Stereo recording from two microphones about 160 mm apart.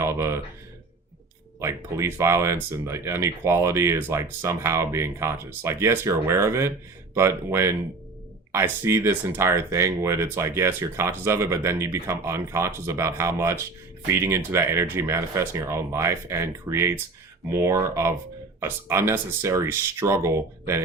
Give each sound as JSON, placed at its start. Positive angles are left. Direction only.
{"t": 0.0, "sound": "speech", "side_deg": -15}
{"t": 1.5, "sound": "speech", "side_deg": -15}